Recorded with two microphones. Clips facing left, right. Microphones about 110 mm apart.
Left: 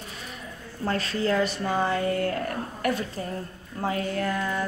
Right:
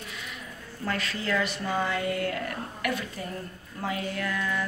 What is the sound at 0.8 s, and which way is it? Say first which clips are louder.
Speech: left 5 dB; 35° left (ahead or behind).